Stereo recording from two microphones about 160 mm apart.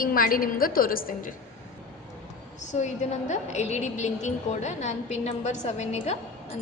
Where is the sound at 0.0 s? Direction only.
60° left (ahead or behind).